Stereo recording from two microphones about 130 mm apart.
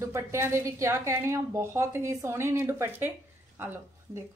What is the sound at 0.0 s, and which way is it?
A woman's voice, 20° right (ahead or behind).